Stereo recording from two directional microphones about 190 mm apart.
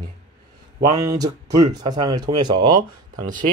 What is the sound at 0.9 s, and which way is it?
Speech, 20° right (ahead or behind).